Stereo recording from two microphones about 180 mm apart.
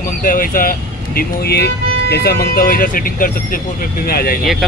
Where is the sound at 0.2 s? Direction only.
50° left (ahead or behind).